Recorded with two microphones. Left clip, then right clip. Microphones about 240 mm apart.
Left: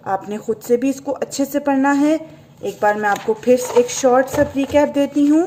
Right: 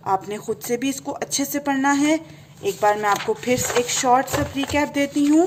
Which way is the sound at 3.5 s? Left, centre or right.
Right.